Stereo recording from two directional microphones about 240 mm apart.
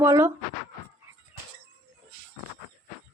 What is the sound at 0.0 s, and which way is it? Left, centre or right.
Speech, centre.